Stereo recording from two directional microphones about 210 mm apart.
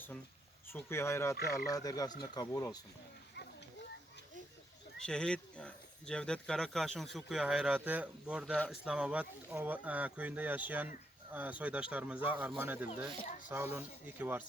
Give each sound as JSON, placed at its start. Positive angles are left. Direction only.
{"t": 0.7, "sound": "speech", "side_deg": 10}
{"t": 4.9, "sound": "speech", "side_deg": 5}
{"t": 8.5, "sound": "speech", "side_deg": 5}
{"t": 8.8, "sound": "speech", "side_deg": -5}
{"t": 13.1, "sound": "speech", "side_deg": 30}
{"t": 13.5, "sound": "speech", "side_deg": -10}